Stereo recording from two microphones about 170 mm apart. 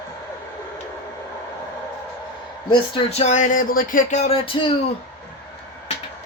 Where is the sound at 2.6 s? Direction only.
35° left (ahead or behind).